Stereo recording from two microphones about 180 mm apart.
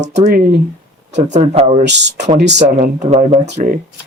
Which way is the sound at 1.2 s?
40° right (ahead or behind).